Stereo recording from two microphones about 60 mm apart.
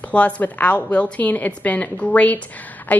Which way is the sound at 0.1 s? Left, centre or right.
Left.